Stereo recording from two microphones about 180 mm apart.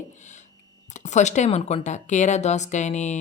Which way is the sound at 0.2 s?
40° left (ahead or behind).